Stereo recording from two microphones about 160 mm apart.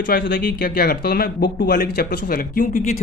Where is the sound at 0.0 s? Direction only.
65° left (ahead or behind).